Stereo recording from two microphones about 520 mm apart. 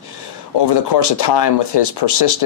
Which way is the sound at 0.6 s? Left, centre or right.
Left.